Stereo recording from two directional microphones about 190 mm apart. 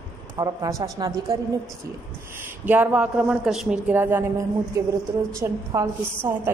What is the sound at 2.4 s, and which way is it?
A woman's voice, 10° right (ahead or behind).